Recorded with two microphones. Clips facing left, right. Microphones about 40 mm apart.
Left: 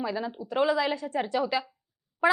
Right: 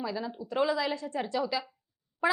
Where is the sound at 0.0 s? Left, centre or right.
Left.